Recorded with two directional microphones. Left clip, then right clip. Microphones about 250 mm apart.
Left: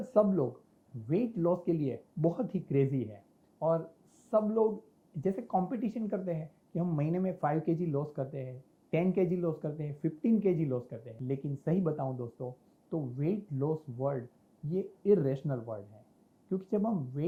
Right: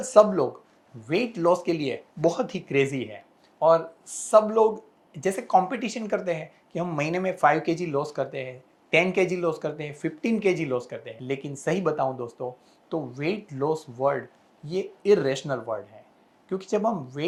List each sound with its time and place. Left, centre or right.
0.0 s speech: centre; by 13.1 s right
13.1 s speech: centre